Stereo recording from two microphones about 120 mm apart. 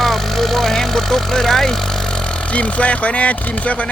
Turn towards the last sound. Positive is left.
turn(degrees=10)  # may be behind; listen again after turning